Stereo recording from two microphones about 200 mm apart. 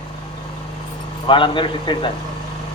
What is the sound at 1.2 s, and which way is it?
Speech, 25° left (ahead or behind).